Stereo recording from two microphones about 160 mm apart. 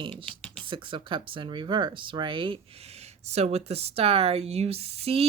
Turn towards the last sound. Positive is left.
turn(degrees=-40)  # may be behind; listen again after turning